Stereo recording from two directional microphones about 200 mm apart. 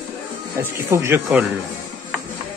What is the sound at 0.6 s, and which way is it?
Speech, 15° right (ahead or behind).